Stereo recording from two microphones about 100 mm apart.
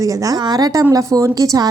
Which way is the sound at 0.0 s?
35° right (ahead or behind).